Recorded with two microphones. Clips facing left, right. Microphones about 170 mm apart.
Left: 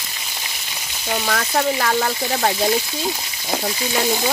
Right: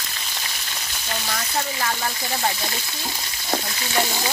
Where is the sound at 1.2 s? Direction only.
85° left.